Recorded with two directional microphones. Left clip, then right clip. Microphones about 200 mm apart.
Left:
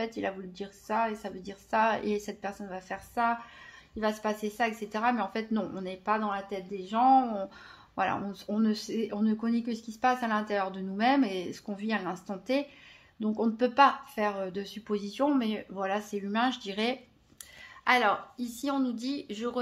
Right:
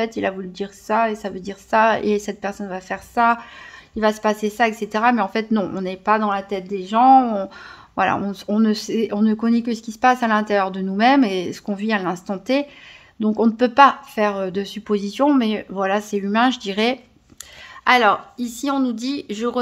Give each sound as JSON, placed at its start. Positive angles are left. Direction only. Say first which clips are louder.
{"t": 0.0, "sound": "speech", "louder": "right 11 dB", "side_deg": -40}